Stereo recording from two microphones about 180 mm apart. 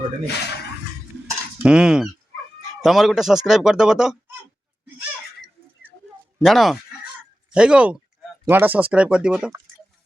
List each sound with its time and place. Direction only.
0.3 s speech: 65° left (ahead or behind)
1.6 s speech: 5° right (ahead or behind)
6.4 s speech: centre (ahead or behind)